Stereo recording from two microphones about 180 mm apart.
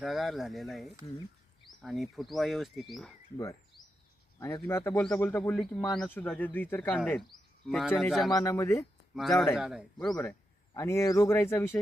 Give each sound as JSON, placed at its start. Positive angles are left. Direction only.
{"t": 0.0, "sound": "speech", "side_deg": 0}
{"t": 4.4, "sound": "speech", "side_deg": 15}
{"t": 8.3, "sound": "speech", "side_deg": 15}
{"t": 9.1, "sound": "speech", "side_deg": 0}